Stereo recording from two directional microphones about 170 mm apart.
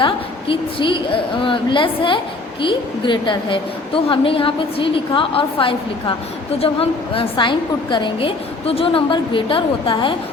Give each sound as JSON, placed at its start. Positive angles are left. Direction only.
{"t": 0.0, "sound": "a woman's voice", "side_deg": 30}